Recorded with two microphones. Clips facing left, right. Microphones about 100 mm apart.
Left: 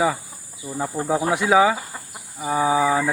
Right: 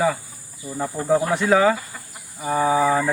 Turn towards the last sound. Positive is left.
turn(degrees=10)  # may be behind; listen again after turning